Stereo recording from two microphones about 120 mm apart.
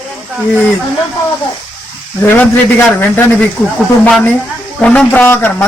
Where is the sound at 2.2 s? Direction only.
15° left (ahead or behind).